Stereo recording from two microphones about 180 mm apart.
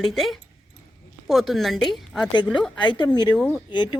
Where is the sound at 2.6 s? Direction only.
25° left (ahead or behind).